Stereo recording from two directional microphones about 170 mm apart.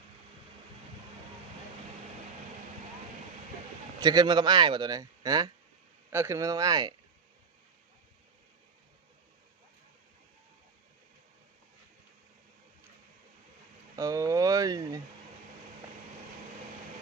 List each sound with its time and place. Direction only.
4.0 s a man's voice: 25° right (ahead or behind)
13.9 s a man's voice: 20° right (ahead or behind)